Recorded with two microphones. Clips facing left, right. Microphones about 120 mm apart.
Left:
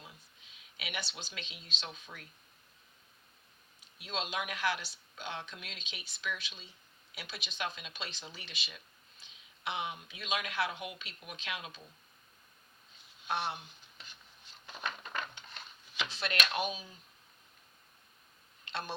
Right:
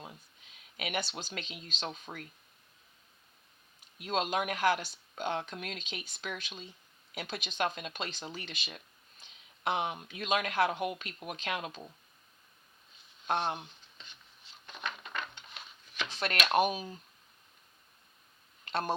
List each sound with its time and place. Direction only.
0.0 s speech: 45° right (ahead or behind)
3.9 s speech: 45° right (ahead or behind)
13.2 s speech: 45° right (ahead or behind)
16.0 s speech: 45° right (ahead or behind)
18.6 s a sound: 45° right (ahead or behind)